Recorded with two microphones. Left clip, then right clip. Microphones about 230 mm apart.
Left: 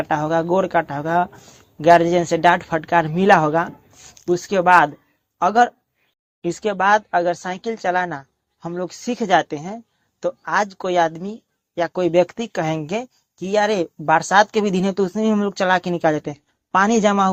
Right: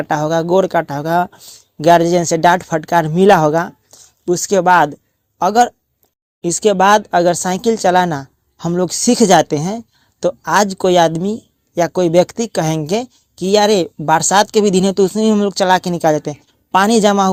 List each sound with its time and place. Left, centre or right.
0.0 s speech: right